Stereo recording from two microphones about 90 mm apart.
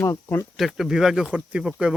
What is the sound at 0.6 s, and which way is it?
Speech, 5° right (ahead or behind).